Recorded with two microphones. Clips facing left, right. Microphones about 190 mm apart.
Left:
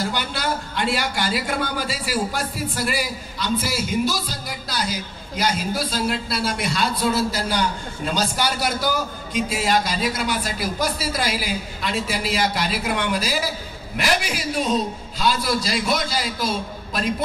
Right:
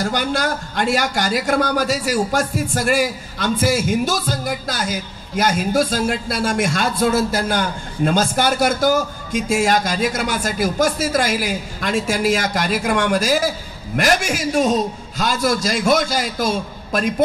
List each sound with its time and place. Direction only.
0.0 s a man's voice: 45° right (ahead or behind)